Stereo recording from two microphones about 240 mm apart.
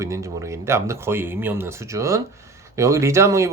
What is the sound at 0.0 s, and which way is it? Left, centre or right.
Speech, centre.